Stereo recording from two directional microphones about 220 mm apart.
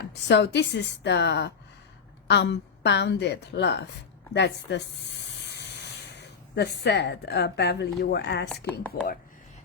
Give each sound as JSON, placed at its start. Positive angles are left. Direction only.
{"t": 0.0, "sound": "a woman's voice", "side_deg": 50}
{"t": 6.1, "sound": "a woman's voice", "side_deg": 50}